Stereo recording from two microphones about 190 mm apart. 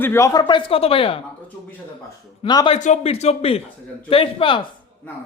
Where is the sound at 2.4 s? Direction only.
25° left (ahead or behind).